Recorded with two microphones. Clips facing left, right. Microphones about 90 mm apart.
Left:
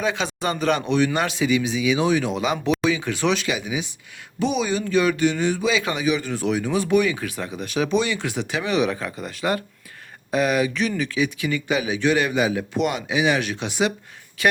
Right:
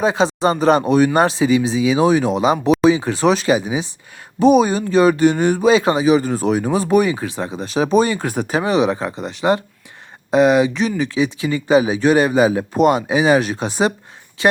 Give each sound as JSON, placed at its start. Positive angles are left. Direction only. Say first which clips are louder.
{"t": 0.0, "sound": "speech", "louder": "right 8 dB", "side_deg": -35}